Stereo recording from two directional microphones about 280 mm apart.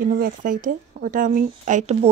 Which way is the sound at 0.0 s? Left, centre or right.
Right.